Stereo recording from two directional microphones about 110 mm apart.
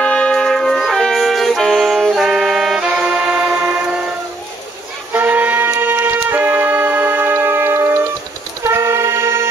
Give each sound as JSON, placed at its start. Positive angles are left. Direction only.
{"t": 0.0, "sound": "music", "side_deg": 10}
{"t": 5.1, "sound": "music", "side_deg": -15}